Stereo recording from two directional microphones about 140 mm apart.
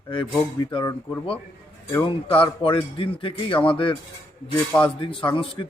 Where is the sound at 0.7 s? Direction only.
35° left (ahead or behind).